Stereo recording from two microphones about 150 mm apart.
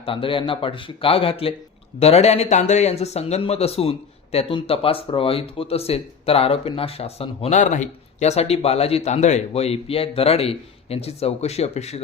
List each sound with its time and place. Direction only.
0.0 s speech: 35° left (ahead or behind)